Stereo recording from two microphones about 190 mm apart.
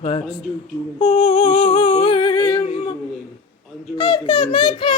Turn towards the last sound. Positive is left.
turn(degrees=25)  # may be behind; listen again after turning